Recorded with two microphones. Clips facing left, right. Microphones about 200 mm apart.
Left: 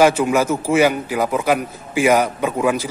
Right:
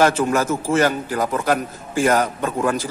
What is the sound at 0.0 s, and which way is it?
A man's voice, 10° left (ahead or behind).